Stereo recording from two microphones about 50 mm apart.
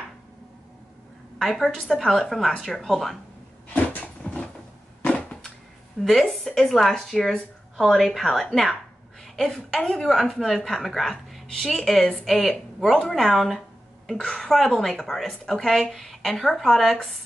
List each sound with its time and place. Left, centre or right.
1.4 s a woman's voice: centre
4.2 s cupboard open or close: centre
5.0 s a sound: centre
6.0 s a woman's voice: centre
10.3 s a woman's voice: centre
14.0 s a woman's voice: centre